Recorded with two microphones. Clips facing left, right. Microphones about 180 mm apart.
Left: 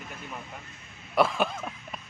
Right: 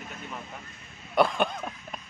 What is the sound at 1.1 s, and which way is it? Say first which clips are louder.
Speech: right 1 dB; centre (ahead or behind).